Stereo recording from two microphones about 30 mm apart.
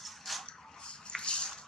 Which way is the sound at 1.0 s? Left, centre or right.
Left.